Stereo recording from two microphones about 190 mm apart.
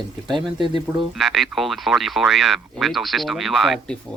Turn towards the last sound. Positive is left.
turn(degrees=0)  # may be behind; listen again after turning